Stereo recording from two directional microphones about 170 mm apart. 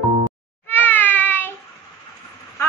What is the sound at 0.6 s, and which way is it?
Meow, 10° left (ahead or behind).